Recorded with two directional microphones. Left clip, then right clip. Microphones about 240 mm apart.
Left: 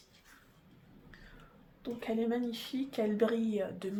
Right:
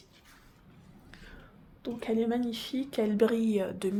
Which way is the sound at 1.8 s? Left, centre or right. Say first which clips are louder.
Right 4 dB; right.